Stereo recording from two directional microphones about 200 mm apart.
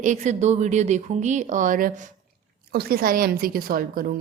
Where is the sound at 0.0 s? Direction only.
35° right (ahead or behind).